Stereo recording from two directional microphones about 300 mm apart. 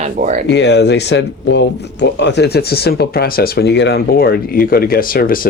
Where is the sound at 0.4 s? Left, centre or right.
Left.